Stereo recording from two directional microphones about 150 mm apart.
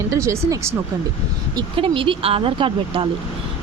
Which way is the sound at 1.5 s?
35° right (ahead or behind).